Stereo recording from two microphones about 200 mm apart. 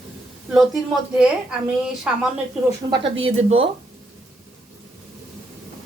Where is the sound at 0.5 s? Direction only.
Centre (ahead or behind).